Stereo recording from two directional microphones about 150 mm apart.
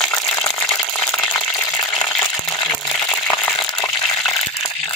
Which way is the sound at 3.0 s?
10° left (ahead or behind).